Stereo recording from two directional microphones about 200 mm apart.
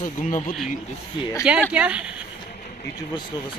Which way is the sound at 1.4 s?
5° right (ahead or behind).